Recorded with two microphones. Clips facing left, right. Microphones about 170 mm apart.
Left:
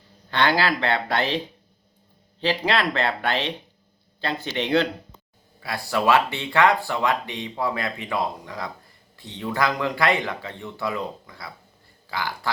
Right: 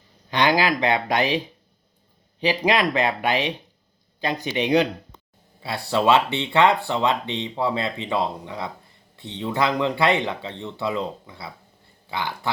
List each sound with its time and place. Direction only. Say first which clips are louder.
0.3 s speech: right 2 dB; 15° right (ahead or behind)
2.4 s speech: right 2 dB; 15° right (ahead or behind)
5.5 s speech: right 2 dB; 25° right (ahead or behind)